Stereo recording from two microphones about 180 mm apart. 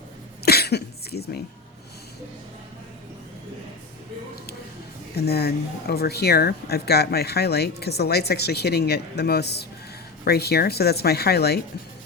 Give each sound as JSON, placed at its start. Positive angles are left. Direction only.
{"t": 0.4, "sound": "cough", "side_deg": 60}
{"t": 5.1, "sound": "speech", "side_deg": 65}